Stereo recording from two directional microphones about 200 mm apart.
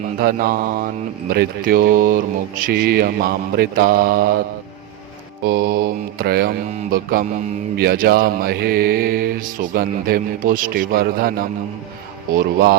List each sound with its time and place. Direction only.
0.2 s mantra: 50° right (ahead or behind)
5.4 s mantra: 50° right (ahead or behind)